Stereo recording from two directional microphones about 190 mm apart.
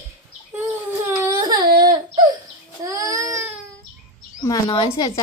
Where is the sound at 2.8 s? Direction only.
15° right (ahead or behind).